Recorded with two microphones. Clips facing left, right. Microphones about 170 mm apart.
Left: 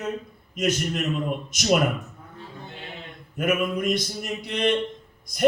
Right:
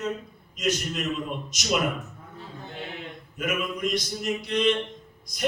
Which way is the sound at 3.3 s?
50° left (ahead or behind).